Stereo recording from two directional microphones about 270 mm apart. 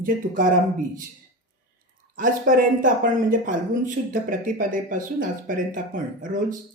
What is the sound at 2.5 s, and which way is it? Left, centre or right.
Speech, right.